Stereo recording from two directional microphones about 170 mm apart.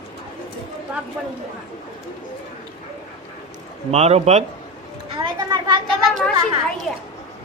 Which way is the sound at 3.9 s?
40° right (ahead or behind).